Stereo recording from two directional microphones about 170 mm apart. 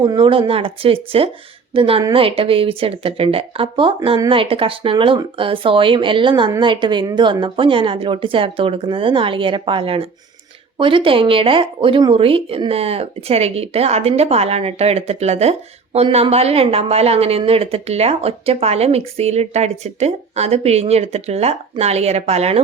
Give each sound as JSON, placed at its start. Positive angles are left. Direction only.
{"t": 0.0, "sound": "speech", "side_deg": -30}